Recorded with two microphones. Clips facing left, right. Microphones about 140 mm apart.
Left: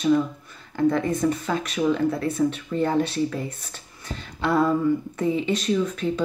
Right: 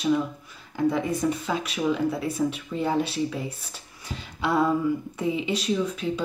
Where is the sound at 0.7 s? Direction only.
5° right (ahead or behind).